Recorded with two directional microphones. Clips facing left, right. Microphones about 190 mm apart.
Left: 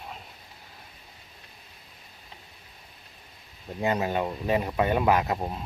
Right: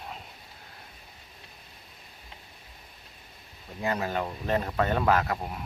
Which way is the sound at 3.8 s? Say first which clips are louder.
Left 3 dB; 20° left (ahead or behind).